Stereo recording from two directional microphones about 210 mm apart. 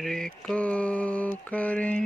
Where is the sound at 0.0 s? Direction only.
5° left (ahead or behind).